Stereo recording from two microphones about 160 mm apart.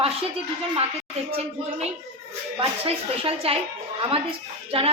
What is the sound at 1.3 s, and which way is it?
A woman's voice, 40° right (ahead or behind).